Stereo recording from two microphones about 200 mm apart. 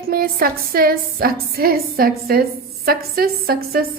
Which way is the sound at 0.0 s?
50° right (ahead or behind).